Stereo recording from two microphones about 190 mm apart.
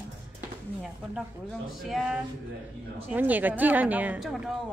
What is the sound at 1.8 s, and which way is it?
Speech, centre (ahead or behind).